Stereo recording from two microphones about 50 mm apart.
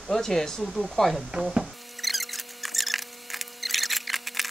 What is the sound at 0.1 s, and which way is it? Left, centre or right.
Speech, centre.